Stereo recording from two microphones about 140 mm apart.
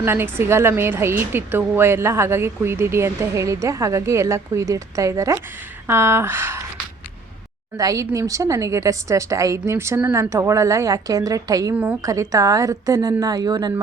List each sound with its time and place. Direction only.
0.0 s a woman's voice: 15° right (ahead or behind)
7.8 s a woman's voice: 25° right (ahead or behind)
11.7 s speech: 10° right (ahead or behind)
12.0 s a woman's voice: 25° right (ahead or behind)